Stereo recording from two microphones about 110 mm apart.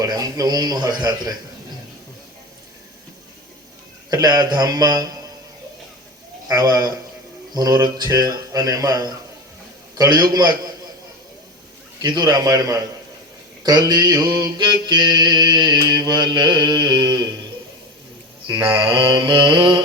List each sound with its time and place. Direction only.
0.0 s mantra: 35° right (ahead or behind)
4.1 s mantra: 35° right (ahead or behind)
6.5 s mantra: 35° right (ahead or behind)
12.0 s mantra: 40° right (ahead or behind)
18.8 s mantra: 50° right (ahead or behind)